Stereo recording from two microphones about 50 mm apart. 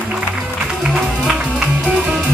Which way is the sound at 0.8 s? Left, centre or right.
Centre.